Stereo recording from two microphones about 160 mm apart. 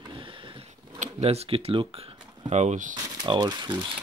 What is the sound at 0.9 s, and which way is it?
Speech, 45° right (ahead or behind).